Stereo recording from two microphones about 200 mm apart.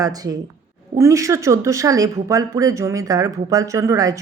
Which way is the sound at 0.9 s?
15° right (ahead or behind).